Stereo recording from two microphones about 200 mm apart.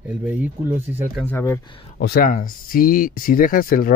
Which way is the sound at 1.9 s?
55° left (ahead or behind).